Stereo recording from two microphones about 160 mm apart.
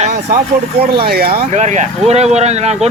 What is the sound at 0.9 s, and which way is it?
Speech, 80° right.